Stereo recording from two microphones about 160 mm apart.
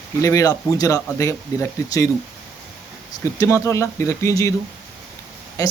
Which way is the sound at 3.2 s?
20° left (ahead or behind).